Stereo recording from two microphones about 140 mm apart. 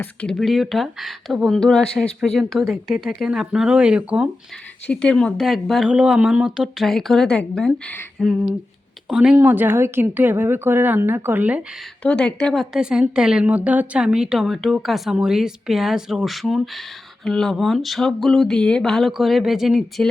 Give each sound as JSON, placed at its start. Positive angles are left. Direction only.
{"t": 0.0, "sound": "speech", "side_deg": 10}
{"t": 4.9, "sound": "speech", "side_deg": 5}
{"t": 8.2, "sound": "a woman's voice", "side_deg": -5}
{"t": 12.0, "sound": "speech", "side_deg": 5}